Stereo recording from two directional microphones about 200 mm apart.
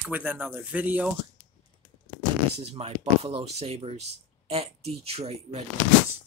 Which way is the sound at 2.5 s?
30° right (ahead or behind).